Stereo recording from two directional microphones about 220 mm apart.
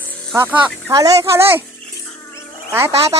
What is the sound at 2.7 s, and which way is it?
Speech, 10° right (ahead or behind).